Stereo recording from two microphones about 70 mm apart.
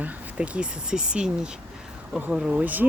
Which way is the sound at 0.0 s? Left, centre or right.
Centre.